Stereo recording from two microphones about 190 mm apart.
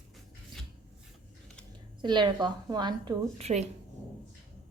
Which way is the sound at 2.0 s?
25° right (ahead or behind).